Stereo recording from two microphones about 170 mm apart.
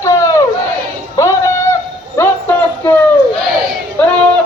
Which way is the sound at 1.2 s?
20° left (ahead or behind).